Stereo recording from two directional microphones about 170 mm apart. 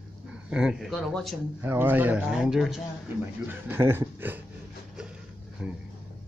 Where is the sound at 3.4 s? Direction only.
15° right (ahead or behind).